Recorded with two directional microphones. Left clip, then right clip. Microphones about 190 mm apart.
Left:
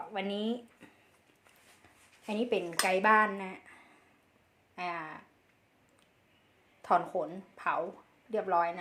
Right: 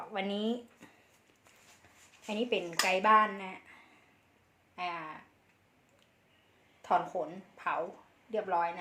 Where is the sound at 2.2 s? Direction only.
25° left (ahead or behind).